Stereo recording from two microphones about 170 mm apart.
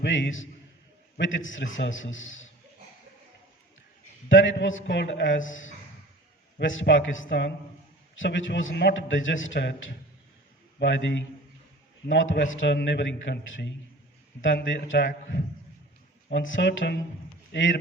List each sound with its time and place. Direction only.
0.0 s a man's voice: 90° left
4.3 s a man's voice: 90° left
6.6 s a man's voice: 90° left
10.8 s a man's voice: 90° left